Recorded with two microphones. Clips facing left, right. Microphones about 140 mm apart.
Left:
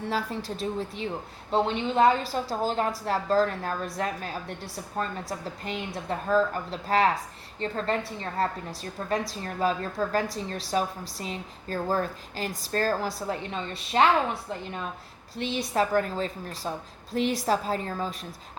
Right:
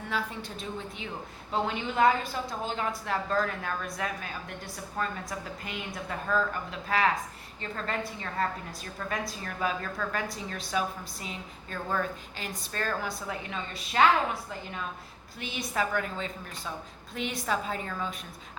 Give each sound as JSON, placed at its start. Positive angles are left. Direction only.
{"t": 0.0, "sound": "a woman's voice", "side_deg": 35}
{"t": 15.4, "sound": "a woman's voice", "side_deg": 30}